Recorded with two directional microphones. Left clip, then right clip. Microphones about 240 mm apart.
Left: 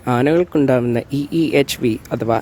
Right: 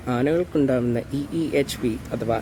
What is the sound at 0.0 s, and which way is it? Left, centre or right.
Speech, left.